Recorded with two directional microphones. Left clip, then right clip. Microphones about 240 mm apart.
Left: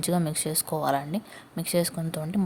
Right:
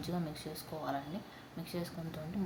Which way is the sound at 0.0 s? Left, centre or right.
Left.